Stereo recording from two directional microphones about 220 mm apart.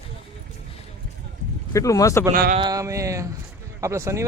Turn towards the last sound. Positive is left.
turn(degrees=-15)  # may be behind; listen again after turning